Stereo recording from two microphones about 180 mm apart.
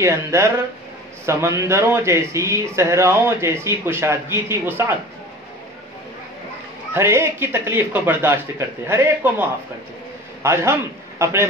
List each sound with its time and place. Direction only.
0.0 s speech: 15° right (ahead or behind)
6.9 s speech: 15° right (ahead or behind)